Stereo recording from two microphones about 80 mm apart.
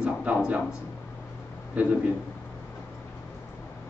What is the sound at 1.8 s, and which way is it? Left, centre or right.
Speech, centre.